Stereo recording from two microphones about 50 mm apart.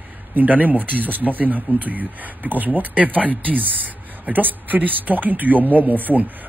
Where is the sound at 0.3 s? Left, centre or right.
Right.